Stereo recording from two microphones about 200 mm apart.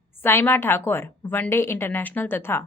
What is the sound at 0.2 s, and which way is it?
A woman's voice, 10° left (ahead or behind).